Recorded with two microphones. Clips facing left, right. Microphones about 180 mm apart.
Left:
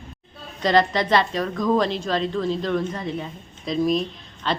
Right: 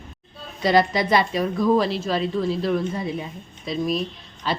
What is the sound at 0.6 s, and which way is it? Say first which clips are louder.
Speech: even; 10° right (ahead or behind).